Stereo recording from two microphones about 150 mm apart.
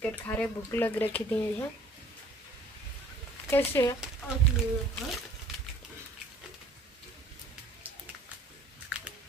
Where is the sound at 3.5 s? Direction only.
15° left (ahead or behind).